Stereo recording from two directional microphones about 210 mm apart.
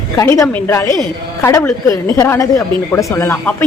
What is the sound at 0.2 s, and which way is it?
A woman's voice, 15° left (ahead or behind).